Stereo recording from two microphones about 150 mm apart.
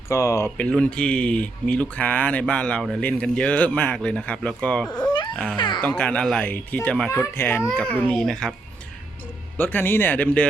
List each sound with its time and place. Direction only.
0.1 s speech: 20° left (ahead or behind)
5.0 s baby cry: 30° left (ahead or behind)
5.5 s speech: 30° left (ahead or behind)
5.8 s a child's voice: 10° left (ahead or behind)
9.6 s speech: 10° left (ahead or behind)